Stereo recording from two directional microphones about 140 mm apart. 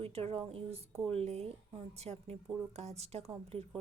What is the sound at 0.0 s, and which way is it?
A woman's voice, 45° right (ahead or behind).